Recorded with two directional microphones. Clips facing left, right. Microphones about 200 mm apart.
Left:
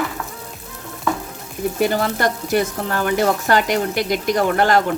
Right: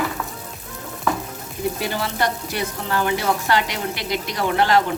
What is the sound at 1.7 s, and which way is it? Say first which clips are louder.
Speech: left 10 dB; 45° left (ahead or behind).